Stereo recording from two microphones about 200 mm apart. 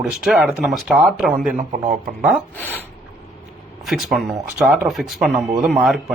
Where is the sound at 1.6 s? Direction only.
35° right (ahead or behind).